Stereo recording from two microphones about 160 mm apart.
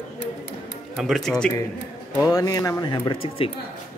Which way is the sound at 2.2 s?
20° left (ahead or behind).